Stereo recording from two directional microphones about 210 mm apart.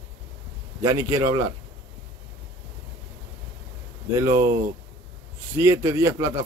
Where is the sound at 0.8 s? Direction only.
15° right (ahead or behind).